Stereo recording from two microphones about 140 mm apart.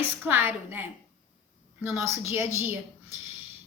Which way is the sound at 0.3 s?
15° right (ahead or behind).